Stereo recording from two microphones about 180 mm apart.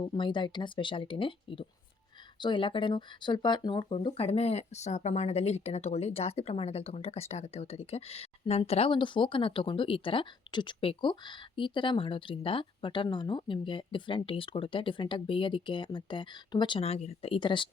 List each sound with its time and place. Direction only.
0.0 s speech: 25° left (ahead or behind)